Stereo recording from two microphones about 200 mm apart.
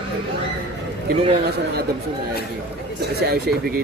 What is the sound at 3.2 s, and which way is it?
Speech, 55° right (ahead or behind).